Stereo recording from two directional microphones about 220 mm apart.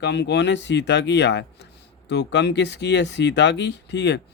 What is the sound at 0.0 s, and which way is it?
Speech, 50° left (ahead or behind).